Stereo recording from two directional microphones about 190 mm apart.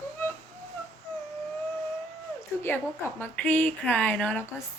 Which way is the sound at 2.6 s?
10° left (ahead or behind).